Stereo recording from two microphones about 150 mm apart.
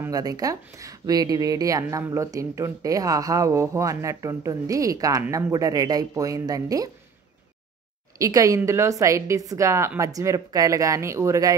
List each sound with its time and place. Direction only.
0.0 s speech: 25° right (ahead or behind)
8.2 s speech: 20° right (ahead or behind)